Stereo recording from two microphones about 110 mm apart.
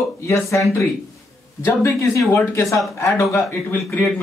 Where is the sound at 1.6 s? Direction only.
25° left (ahead or behind).